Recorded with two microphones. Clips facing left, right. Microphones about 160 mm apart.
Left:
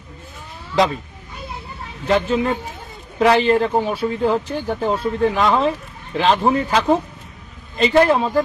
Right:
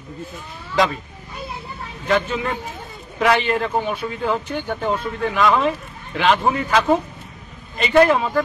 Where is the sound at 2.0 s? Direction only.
35° left (ahead or behind).